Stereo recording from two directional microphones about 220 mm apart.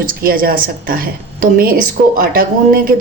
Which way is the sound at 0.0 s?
40° right (ahead or behind).